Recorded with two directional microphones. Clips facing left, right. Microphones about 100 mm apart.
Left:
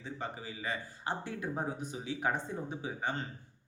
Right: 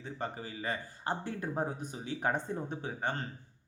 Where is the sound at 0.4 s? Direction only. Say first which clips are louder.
Right 1 dB; 45° right (ahead or behind).